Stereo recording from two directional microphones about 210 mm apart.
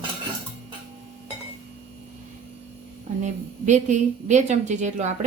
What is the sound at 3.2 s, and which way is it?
A woman's voice, 35° right (ahead or behind).